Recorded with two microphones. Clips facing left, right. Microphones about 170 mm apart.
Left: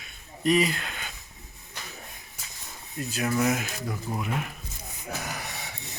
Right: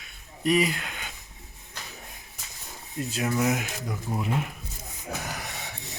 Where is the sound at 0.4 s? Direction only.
10° right (ahead or behind).